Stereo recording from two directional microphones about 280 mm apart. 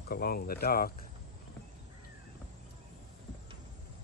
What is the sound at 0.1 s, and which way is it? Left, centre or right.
Speech, left.